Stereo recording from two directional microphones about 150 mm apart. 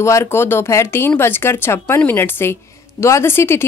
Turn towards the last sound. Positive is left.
turn(degrees=15)  # may be behind; listen again after turning